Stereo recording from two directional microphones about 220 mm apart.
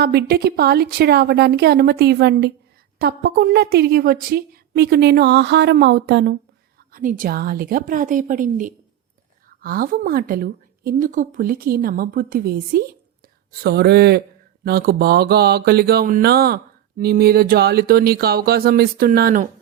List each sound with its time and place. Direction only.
0.0 s a woman's voice: 45° right (ahead or behind)
6.9 s a woman's voice: 40° right (ahead or behind)